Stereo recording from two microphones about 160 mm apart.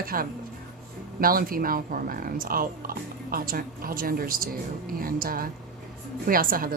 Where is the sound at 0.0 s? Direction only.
65° right (ahead or behind).